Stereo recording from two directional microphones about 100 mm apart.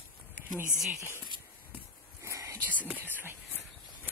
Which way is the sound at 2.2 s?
30° right (ahead or behind).